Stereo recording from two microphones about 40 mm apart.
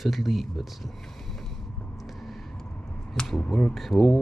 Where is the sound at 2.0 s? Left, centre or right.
Centre.